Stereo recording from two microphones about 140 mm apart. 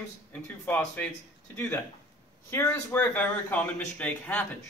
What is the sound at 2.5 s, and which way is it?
Speech, 15° left (ahead or behind).